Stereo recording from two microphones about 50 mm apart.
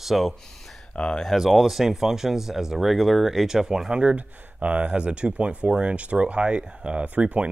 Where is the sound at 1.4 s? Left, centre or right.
Centre.